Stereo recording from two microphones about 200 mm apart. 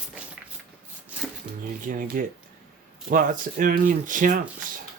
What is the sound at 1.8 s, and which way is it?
Speech, 45° right (ahead or behind).